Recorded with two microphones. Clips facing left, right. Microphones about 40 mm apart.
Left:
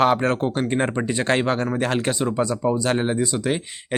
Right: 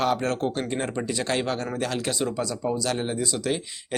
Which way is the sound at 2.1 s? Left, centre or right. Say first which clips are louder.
Left 5 dB; left.